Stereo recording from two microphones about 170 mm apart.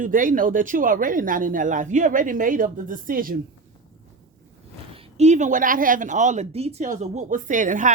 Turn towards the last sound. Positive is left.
turn(degrees=-50)  # may be behind; listen again after turning